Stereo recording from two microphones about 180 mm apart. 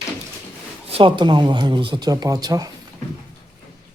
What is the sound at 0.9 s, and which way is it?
Speech, 30° right (ahead or behind).